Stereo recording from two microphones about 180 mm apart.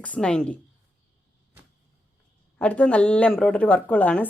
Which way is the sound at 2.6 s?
5° left (ahead or behind).